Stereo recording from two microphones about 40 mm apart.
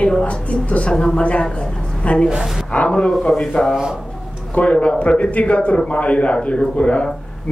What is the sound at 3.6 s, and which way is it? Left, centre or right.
A woman's voice, left.